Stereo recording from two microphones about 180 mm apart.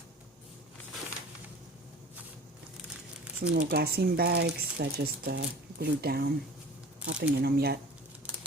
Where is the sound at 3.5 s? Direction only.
60° right (ahead or behind).